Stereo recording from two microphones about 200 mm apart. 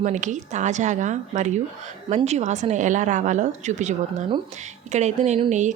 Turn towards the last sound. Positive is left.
turn(degrees=-35)  # may be behind; listen again after turning